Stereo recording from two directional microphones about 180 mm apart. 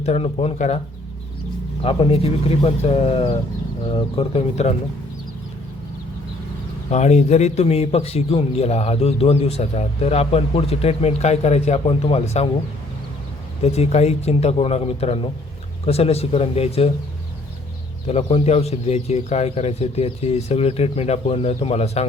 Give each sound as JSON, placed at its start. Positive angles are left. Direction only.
{"t": 0.0, "sound": "speech", "side_deg": 35}
{"t": 1.8, "sound": "speech", "side_deg": 30}
{"t": 6.9, "sound": "speech", "side_deg": 40}
{"t": 13.6, "sound": "speech", "side_deg": 35}
{"t": 18.1, "sound": "speech", "side_deg": 35}